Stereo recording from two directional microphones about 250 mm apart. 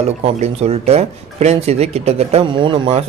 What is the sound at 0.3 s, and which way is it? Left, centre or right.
Speech, right.